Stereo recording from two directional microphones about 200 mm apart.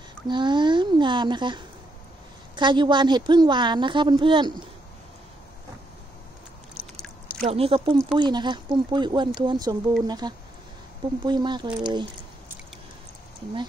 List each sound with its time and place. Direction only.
0.3 s a sound: 25° right (ahead or behind)
2.5 s a woman's voice: 25° right (ahead or behind)
7.4 s a woman's voice: 30° right (ahead or behind)